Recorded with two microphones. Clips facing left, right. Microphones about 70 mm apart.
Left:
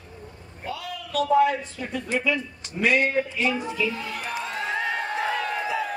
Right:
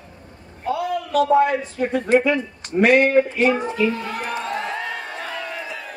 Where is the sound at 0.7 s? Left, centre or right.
Right.